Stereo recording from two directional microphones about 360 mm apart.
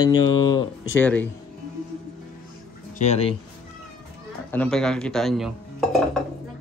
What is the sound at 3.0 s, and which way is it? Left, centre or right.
Speech, centre.